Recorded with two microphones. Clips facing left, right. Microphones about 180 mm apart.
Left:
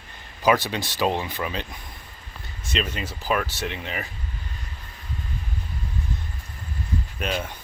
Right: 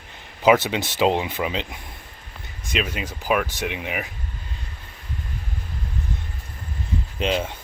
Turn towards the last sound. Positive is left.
turn(degrees=-20)  # may be behind; listen again after turning